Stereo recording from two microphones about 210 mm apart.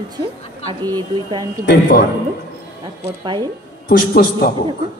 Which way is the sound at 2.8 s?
20° right (ahead or behind).